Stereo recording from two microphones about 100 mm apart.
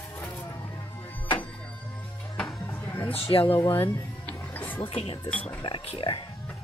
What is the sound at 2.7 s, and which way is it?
Music, 20° left (ahead or behind).